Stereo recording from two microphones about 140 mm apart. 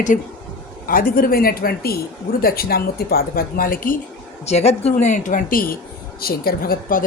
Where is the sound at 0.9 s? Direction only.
90° left.